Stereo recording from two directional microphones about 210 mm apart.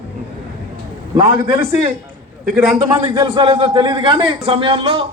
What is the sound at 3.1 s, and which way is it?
A man's voice, 20° right (ahead or behind).